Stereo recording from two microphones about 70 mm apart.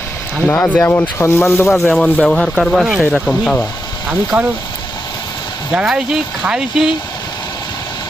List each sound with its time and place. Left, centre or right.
0.4 s speech: left
1.6 s speech: centre
3.0 s speech: centre
4.3 s speech: right
5.7 s speech: centre